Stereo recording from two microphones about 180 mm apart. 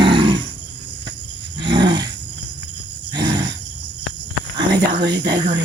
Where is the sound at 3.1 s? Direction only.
20° right (ahead or behind).